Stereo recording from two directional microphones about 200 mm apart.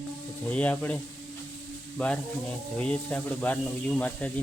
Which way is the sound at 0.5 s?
5° left (ahead or behind).